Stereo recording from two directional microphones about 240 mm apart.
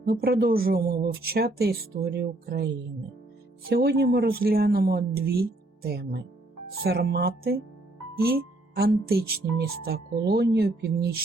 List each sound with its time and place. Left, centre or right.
0.0 s speech: right